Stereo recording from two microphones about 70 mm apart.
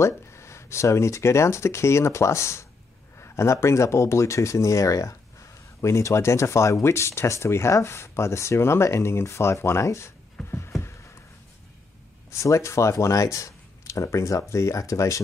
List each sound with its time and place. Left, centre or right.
0.0 s speech: left
10.4 s a sound: centre
12.3 s speech: left